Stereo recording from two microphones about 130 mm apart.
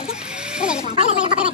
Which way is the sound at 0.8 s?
60° left (ahead or behind).